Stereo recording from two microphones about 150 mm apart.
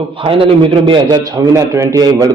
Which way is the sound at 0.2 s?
35° right (ahead or behind).